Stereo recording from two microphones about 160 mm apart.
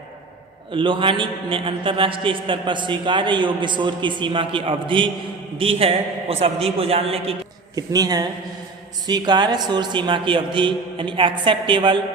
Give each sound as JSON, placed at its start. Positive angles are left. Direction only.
{"t": 0.7, "sound": "a man's voice", "side_deg": -30}
{"t": 7.8, "sound": "a man's voice", "side_deg": -25}